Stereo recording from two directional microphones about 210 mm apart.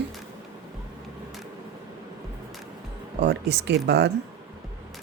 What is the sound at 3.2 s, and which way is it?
Speech, 55° right (ahead or behind).